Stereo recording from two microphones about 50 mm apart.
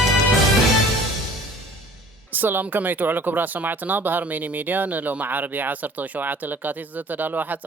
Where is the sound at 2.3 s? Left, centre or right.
Right.